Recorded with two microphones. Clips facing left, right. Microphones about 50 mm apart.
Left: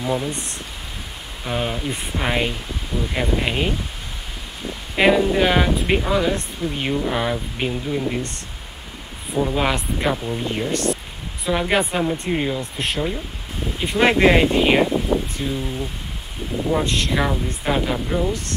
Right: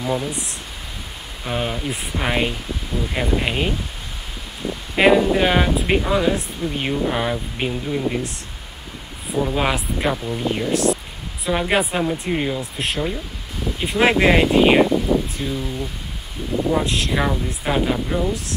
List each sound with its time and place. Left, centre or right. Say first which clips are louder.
0.3 s speech: even; centre
4.9 s speech: right 1 dB; centre
15.5 s speech: even; left
16.7 s speech: left 2 dB; centre